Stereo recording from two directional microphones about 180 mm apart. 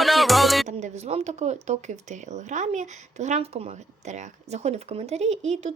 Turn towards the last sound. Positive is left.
turn(degrees=-40)  # may be behind; listen again after turning